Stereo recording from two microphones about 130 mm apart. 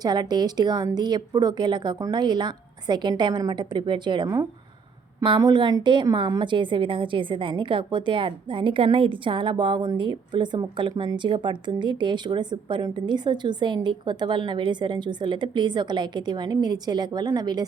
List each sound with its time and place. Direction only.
0.0 s speech: 30° right (ahead or behind)